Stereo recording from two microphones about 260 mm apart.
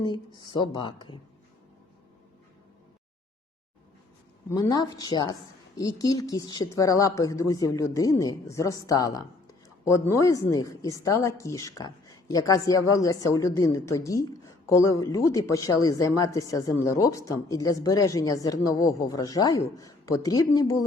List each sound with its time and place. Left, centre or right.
0.3 s a woman's voice: centre
4.4 s a woman's voice: centre